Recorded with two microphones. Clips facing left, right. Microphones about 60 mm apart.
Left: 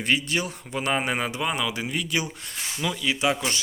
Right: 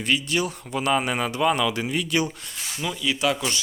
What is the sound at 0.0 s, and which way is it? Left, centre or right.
Speech, left.